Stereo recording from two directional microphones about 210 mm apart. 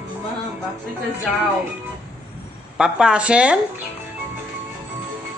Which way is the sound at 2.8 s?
5° right (ahead or behind).